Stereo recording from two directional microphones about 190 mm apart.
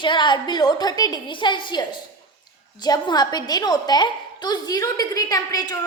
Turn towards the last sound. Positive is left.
turn(degrees=20)  # may be behind; listen again after turning